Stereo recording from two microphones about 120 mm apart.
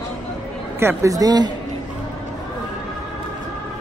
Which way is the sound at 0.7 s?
25° right (ahead or behind).